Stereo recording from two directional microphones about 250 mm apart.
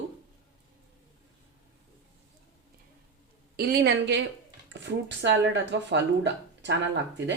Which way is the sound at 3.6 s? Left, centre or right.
Right.